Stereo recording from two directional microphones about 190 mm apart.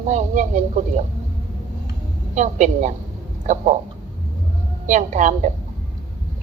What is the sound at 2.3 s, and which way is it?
Speech, 40° right (ahead or behind).